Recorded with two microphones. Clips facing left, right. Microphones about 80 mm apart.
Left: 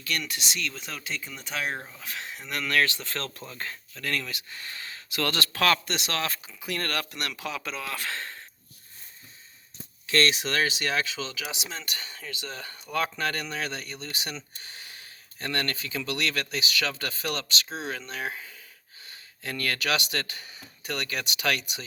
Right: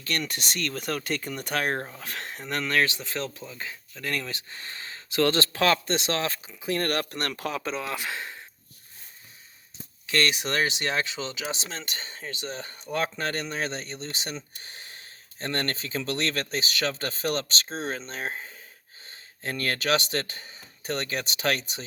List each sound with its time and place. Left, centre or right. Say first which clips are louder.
0.0 s speech: right 1 dB; right
3.0 s speech: right 2 dB; centre
4.0 s speech: even; right
7.6 s speech: right 4 dB; right
7.9 s speech: right 1 dB; centre
10.4 s speech: even; right